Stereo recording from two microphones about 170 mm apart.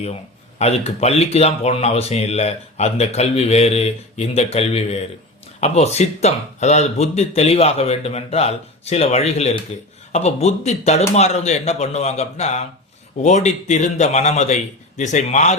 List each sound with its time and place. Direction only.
0.6 s a man's voice: 40° left (ahead or behind)